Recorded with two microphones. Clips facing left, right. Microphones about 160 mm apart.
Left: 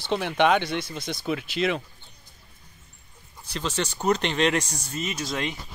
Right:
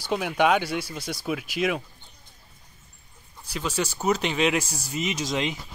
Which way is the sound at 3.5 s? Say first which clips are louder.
Right 1 dB; 10° right (ahead or behind).